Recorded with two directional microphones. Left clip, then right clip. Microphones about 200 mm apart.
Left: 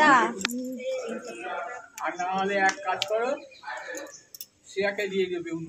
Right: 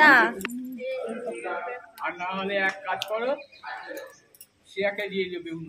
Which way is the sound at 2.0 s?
10° left (ahead or behind).